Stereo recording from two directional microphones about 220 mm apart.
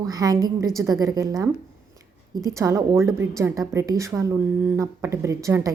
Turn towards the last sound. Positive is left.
turn(degrees=-15)  # may be behind; listen again after turning